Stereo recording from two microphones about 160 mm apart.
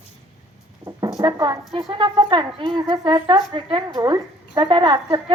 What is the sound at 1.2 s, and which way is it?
Speech, 25° right (ahead or behind).